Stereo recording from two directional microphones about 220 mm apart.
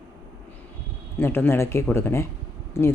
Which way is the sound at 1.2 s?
10° left (ahead or behind).